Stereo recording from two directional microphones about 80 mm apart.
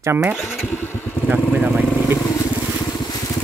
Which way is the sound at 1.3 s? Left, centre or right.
Right.